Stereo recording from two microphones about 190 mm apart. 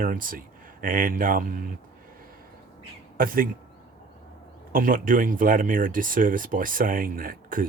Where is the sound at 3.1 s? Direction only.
50° right (ahead or behind).